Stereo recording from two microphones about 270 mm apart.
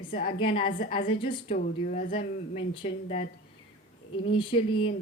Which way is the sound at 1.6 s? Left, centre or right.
Left.